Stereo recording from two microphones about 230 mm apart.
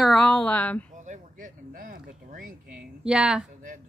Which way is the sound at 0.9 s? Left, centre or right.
Right.